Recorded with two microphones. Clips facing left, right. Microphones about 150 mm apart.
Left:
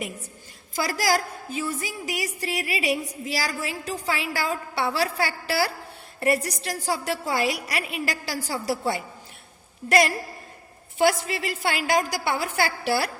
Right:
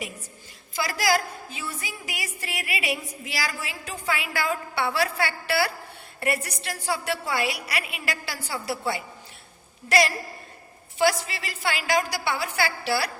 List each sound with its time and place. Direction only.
0.7 s a woman's voice: 45° left (ahead or behind)
10.9 s a woman's voice: 50° left (ahead or behind)